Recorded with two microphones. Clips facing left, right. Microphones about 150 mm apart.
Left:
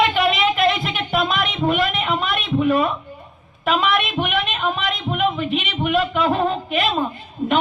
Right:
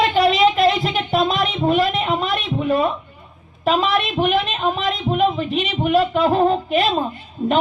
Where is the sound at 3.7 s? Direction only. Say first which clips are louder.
Right 1 dB; 35° right (ahead or behind).